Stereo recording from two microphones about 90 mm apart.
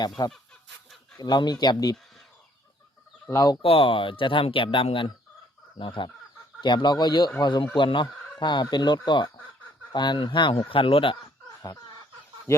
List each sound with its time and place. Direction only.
0.2 s speech: 45° left (ahead or behind)
3.2 s speech: 40° left (ahead or behind)
3.6 s speech: 80° left
5.7 s speech: 65° left (ahead or behind)
10.7 s speech: 85° left
12.5 s speech: 30° left (ahead or behind)